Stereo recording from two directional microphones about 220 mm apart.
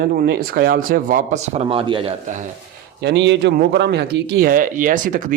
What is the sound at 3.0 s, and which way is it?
Speech, 50° right (ahead or behind).